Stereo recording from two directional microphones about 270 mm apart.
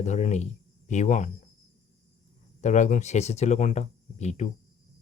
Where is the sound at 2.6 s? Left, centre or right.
Left.